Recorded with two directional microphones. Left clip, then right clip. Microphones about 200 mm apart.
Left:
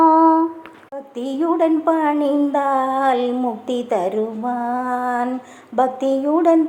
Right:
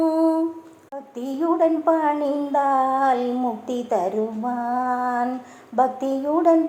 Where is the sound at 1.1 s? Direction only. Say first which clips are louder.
Left 2 dB; 30° left (ahead or behind).